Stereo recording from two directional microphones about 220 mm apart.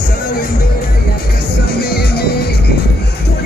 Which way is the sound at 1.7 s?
45° left (ahead or behind).